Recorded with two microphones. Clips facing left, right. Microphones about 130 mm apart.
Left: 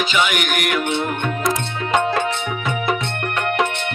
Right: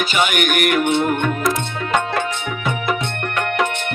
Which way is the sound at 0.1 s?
45° right (ahead or behind).